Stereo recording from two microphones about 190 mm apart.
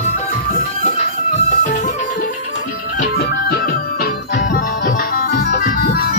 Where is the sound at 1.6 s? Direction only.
40° left (ahead or behind).